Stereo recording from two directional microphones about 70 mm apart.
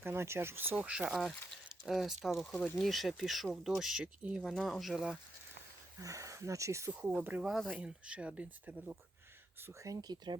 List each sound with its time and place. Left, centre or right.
0.0 s speech: right
0.8 s speech: centre
1.1 s speech: centre
2.5 s speech: centre
2.7 s speech: centre
4.2 s speech: centre
4.4 s speech: centre
6.0 s speech: right
7.2 s speech: right
7.4 s speech: centre
7.8 s speech: centre
9.8 s speech: right